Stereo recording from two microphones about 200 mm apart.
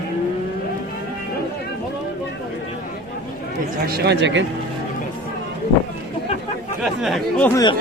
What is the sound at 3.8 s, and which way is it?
Speech, 55° right (ahead or behind).